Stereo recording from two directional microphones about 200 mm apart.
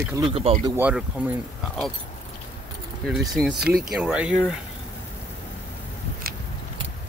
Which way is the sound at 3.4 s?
Centre (ahead or behind).